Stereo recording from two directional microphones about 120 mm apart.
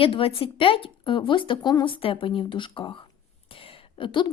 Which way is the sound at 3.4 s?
50° left (ahead or behind).